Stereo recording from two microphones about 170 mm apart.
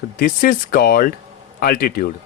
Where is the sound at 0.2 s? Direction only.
55° left (ahead or behind).